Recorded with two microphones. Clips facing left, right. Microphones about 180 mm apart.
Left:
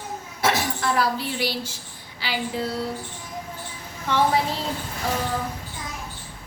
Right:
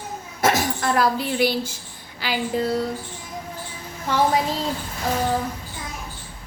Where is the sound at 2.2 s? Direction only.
45° right (ahead or behind).